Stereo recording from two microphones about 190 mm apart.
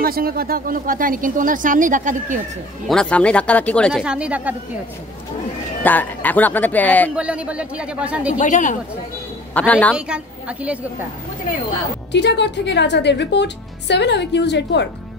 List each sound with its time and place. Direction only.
0.0 s speech: 50° right (ahead or behind)
2.9 s speech: 5° left (ahead or behind)
5.9 s speech: 10° left (ahead or behind)
7.2 s speech: 5° right (ahead or behind)
8.4 s speech: 40° left (ahead or behind)
9.5 s speech: 10° left (ahead or behind)
9.9 s speech: 5° right (ahead or behind)
12.1 s a woman's voice: 65° left (ahead or behind)